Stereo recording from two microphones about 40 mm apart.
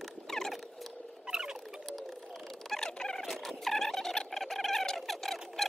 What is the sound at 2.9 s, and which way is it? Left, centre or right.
Fowl, centre.